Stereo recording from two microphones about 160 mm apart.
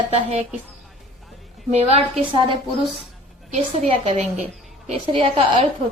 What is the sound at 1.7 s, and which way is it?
A woman's voice, 35° right (ahead or behind).